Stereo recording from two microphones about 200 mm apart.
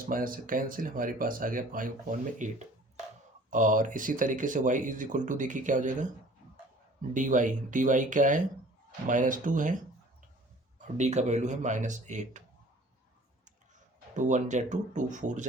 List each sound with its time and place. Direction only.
0.0 s speech: 45° right (ahead or behind)
7.1 s speech: 40° right (ahead or behind)
10.9 s speech: 35° right (ahead or behind)
14.1 s speech: 40° right (ahead or behind)